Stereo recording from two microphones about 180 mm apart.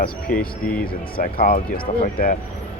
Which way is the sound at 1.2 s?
55° left (ahead or behind).